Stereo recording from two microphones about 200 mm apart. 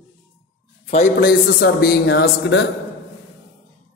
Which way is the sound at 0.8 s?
35° left (ahead or behind).